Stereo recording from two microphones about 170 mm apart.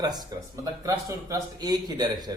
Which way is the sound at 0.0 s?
25° right (ahead or behind).